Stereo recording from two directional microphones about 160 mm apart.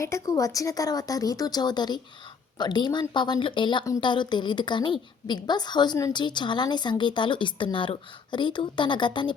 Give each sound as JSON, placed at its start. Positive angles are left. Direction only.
{"t": 0.0, "sound": "a woman's voice", "side_deg": 20}